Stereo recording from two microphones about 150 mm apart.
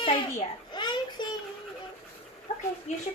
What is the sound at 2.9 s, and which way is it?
Speech, 50° left (ahead or behind).